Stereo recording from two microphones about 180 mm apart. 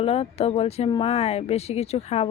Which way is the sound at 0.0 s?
35° left (ahead or behind).